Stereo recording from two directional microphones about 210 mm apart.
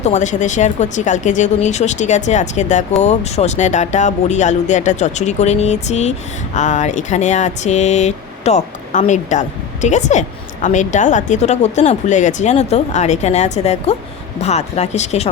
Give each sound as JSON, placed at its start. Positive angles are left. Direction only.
{"t": 0.0, "sound": "speech", "side_deg": 35}